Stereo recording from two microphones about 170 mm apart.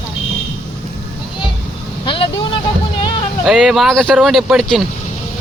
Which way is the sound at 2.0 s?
30° left (ahead or behind).